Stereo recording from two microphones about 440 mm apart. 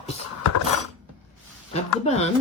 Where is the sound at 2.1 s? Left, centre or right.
Centre.